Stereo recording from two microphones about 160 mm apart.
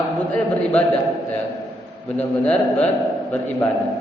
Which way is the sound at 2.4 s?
10° left (ahead or behind).